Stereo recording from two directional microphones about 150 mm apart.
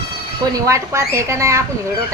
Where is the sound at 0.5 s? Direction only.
20° right (ahead or behind).